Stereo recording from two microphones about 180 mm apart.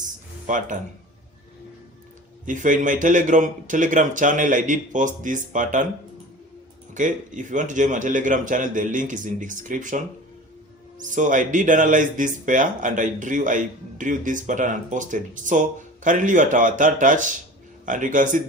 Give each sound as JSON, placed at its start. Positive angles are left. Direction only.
{"t": 0.4, "sound": "speech", "side_deg": -45}
{"t": 2.5, "sound": "speech", "side_deg": -45}
{"t": 6.9, "sound": "speech", "side_deg": -45}
{"t": 11.1, "sound": "speech", "side_deg": -45}